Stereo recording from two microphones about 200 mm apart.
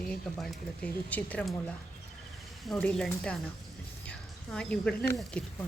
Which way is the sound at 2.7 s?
5° left (ahead or behind).